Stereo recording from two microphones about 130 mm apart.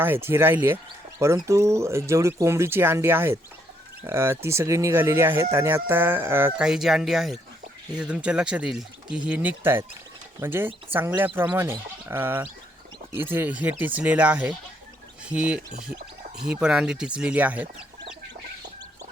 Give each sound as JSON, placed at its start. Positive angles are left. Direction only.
{"t": 0.0, "sound": "speech", "side_deg": -15}
{"t": 6.6, "sound": "speech", "side_deg": -5}